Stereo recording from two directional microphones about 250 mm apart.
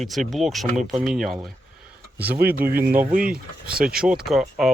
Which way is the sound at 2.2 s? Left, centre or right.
Right.